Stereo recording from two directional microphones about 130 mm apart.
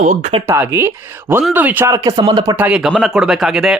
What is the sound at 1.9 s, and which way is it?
Speech, 25° right (ahead or behind).